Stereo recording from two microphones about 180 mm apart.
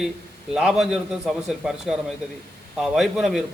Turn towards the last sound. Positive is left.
turn(degrees=0)  # may be behind; listen again after turning